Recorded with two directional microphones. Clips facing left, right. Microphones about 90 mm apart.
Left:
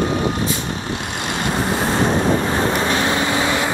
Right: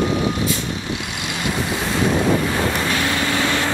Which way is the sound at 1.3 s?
40° left (ahead or behind).